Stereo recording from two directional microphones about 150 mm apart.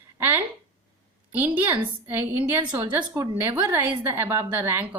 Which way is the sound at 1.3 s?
10° right (ahead or behind).